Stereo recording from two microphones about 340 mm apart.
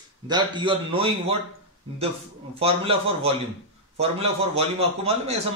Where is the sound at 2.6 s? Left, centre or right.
Centre.